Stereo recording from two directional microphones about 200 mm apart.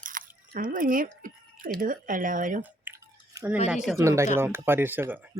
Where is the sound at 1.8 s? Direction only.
40° right (ahead or behind).